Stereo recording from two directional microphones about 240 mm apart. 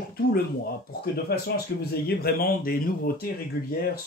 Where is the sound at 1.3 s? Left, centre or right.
Left.